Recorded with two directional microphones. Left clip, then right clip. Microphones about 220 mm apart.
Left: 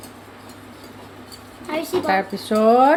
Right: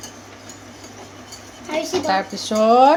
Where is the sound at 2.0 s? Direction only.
20° left (ahead or behind).